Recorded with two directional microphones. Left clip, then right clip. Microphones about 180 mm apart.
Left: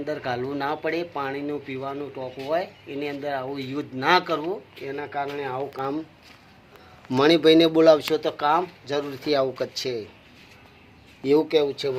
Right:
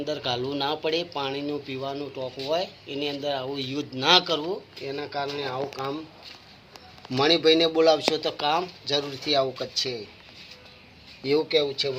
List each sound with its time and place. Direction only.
0.0 s speech: 25° left (ahead or behind)
5.3 s speech: 30° left (ahead or behind)
5.7 s speech: 45° left (ahead or behind)
7.1 s speech: 55° left (ahead or behind)
11.2 s speech: 40° left (ahead or behind)